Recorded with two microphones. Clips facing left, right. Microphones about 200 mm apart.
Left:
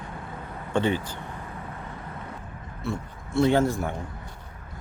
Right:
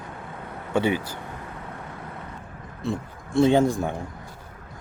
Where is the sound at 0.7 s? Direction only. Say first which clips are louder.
Right 2 dB; 10° right (ahead or behind).